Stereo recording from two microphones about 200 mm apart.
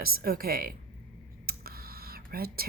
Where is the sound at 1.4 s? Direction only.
50° right (ahead or behind).